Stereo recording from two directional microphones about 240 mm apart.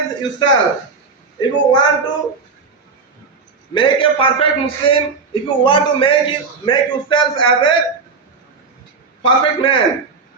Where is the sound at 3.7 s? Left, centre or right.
Left.